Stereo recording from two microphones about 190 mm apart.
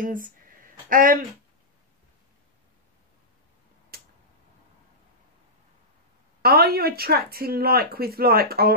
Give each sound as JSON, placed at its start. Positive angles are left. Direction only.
{"t": 0.0, "sound": "a sound", "side_deg": -45}
{"t": 3.9, "sound": "tick-tock", "side_deg": -55}
{"t": 6.4, "sound": "speech", "side_deg": -55}